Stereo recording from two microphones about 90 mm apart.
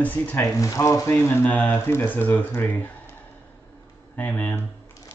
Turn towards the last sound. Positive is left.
turn(degrees=20)  # may be behind; listen again after turning